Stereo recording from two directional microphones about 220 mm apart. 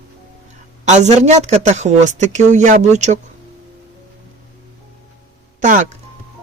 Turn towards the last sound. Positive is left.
turn(degrees=-35)  # may be behind; listen again after turning